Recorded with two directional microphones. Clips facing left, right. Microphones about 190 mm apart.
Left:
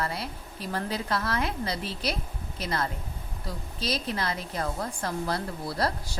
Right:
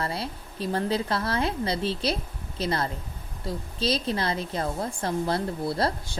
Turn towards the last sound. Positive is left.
turn(degrees=-25)  # may be behind; listen again after turning